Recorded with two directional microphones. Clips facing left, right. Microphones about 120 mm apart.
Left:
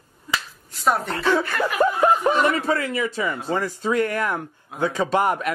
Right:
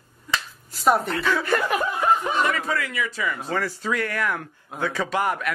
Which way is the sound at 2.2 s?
45° left (ahead or behind).